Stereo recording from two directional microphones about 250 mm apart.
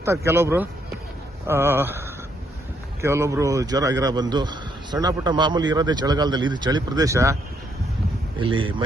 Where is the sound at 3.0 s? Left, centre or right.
Centre.